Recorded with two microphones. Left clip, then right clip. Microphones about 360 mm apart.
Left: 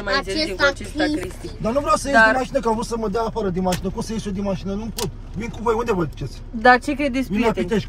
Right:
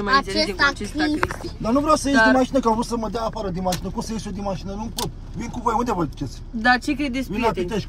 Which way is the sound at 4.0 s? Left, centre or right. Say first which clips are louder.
Left 2 dB; right.